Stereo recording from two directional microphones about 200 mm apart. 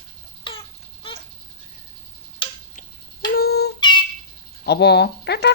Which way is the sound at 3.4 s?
55° left (ahead or behind).